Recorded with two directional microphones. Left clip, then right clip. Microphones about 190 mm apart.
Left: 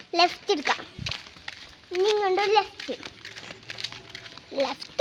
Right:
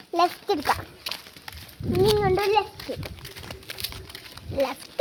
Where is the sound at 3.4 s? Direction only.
50° right (ahead or behind).